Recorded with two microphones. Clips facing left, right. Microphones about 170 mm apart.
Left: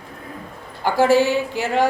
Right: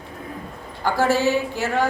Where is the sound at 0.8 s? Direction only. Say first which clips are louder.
Left 4 dB; 15° left (ahead or behind).